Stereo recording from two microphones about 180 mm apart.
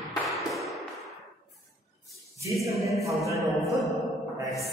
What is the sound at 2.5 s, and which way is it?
Choir, centre (ahead or behind).